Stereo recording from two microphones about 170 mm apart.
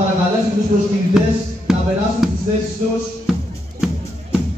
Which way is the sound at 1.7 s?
Centre (ahead or behind).